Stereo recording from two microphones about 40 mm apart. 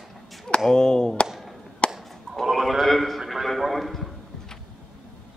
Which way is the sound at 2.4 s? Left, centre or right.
Centre.